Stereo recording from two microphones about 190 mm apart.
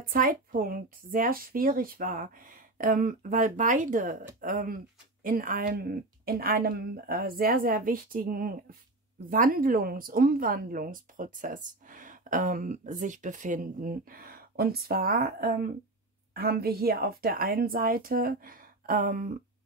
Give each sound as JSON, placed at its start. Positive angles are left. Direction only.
{"t": 0.1, "sound": "speech", "side_deg": -45}